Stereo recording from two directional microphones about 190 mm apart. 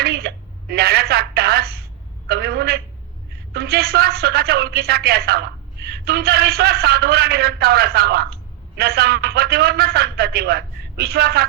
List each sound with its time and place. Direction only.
0.0 s telephone: 55° right (ahead or behind)
2.2 s a sound: 55° right (ahead or behind)
3.5 s a man's voice: 55° right (ahead or behind)